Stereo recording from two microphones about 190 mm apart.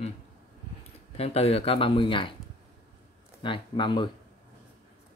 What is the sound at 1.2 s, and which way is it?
Speech, 30° left (ahead or behind).